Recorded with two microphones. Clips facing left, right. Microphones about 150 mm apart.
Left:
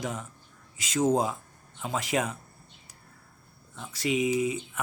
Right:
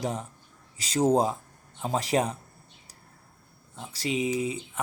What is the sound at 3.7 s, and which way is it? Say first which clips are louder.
Speech: left 2 dB; 30° right (ahead or behind).